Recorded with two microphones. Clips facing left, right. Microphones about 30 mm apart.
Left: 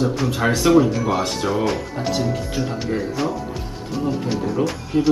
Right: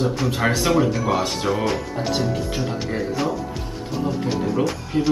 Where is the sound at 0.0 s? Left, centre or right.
Centre.